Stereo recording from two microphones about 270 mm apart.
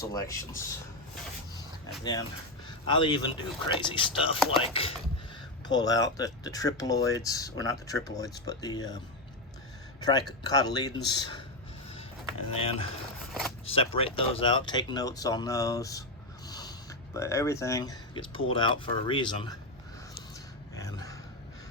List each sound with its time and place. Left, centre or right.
0.0 s speech: centre
2.6 s speech: centre
10.0 s speech: centre
12.5 s speech: left
16.5 s snort: centre
17.2 s speech: centre
20.7 s a sound: centre